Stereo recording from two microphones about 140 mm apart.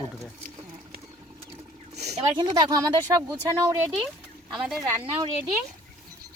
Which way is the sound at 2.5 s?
25° right (ahead or behind).